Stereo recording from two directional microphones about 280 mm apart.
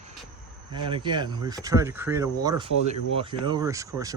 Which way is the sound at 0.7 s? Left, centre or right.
Centre.